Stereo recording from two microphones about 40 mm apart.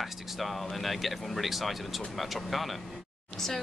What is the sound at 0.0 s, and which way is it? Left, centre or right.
A woman's voice, centre.